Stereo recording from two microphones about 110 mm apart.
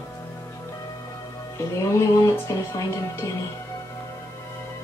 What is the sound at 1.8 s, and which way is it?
Speech, 25° left (ahead or behind).